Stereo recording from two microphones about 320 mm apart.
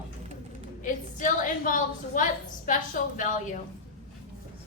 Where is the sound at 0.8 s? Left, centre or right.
Left.